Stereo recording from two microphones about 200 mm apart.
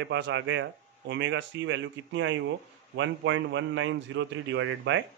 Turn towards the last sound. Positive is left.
turn(degrees=-70)  # may be behind; listen again after turning